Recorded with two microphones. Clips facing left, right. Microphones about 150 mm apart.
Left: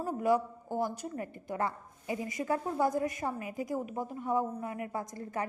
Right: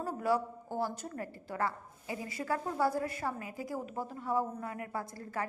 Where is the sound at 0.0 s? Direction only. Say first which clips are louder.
Left 3 dB; 15° left (ahead or behind).